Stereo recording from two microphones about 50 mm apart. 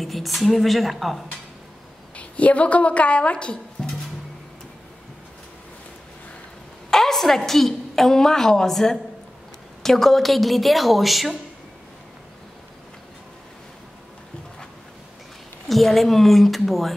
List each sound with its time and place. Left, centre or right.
0.0 s a woman's voice: centre
2.1 s a woman's voice: left
6.9 s a woman's voice: centre
15.7 s a woman's voice: centre